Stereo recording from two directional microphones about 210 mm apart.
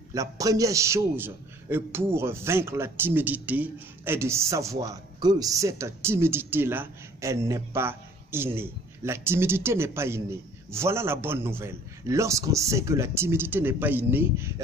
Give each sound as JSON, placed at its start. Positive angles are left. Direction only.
{"t": 0.1, "sound": "a man's voice", "side_deg": -15}